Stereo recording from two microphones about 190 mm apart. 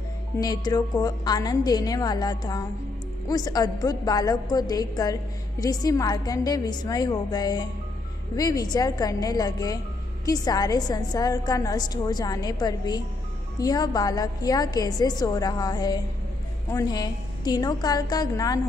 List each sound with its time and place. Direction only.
0.4 s a woman's voice: 20° left (ahead or behind)